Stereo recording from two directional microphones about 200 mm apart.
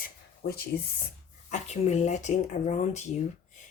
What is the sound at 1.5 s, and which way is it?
A woman's voice, 35° left (ahead or behind).